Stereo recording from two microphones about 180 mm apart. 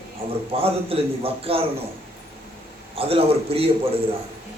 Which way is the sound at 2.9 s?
30° right (ahead or behind).